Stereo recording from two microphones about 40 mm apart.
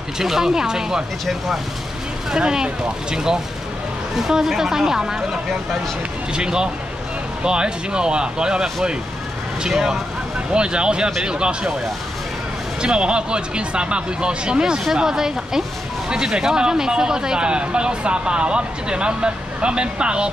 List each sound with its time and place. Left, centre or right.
0.2 s speech: centre
2.3 s speech: centre
9.7 s speech: centre
10.5 s speech: right
12.8 s speech: right